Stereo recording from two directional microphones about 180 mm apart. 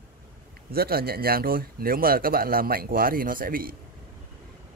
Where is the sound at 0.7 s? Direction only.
60° right (ahead or behind).